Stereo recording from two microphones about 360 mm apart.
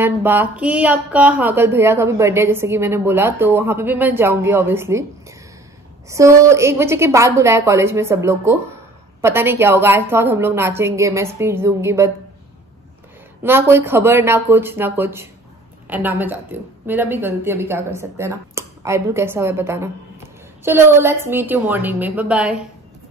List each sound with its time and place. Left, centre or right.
0.0 s speech: centre
6.0 s speech: centre
13.4 s a woman's voice: centre